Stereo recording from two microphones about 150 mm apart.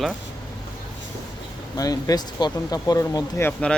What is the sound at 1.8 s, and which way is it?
Speech, 25° left (ahead or behind).